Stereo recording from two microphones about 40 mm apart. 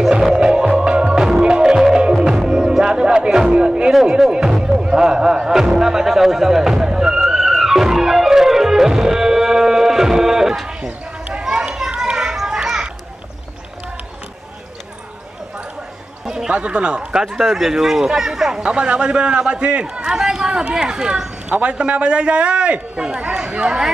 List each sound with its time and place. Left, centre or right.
0.2 s music: centre
3.9 s music: centre
4.3 s music: right
7.2 s music: centre
11.4 s children playing: centre
16.4 s speech: right
17.1 s speech: centre
17.4 s a man's voice: centre; by 23.8 s right